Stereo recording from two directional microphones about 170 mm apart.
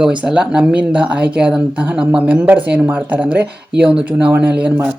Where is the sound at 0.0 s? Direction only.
5° right (ahead or behind).